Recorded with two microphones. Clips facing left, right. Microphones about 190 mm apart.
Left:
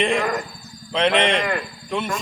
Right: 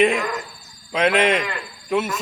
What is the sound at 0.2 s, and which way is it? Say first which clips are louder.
Cricket: left 3 dB; 55° left (ahead or behind).